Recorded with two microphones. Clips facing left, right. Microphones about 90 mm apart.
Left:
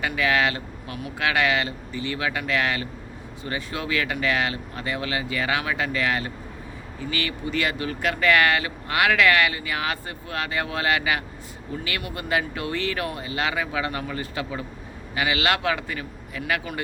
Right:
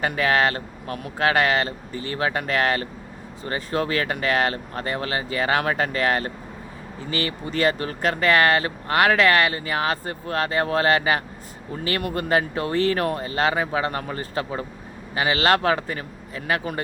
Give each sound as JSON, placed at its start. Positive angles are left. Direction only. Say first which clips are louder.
{"t": 0.0, "sound": "speech", "louder": "right 2 dB", "side_deg": -40}